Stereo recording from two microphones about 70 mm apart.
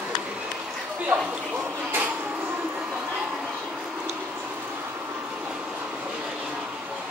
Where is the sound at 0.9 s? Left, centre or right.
Centre.